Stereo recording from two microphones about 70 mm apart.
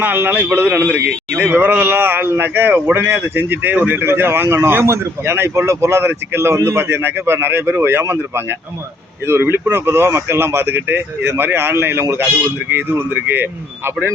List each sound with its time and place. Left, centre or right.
0.0 s a man's voice: right